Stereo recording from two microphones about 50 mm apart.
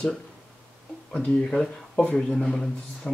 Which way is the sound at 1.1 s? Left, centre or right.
Left.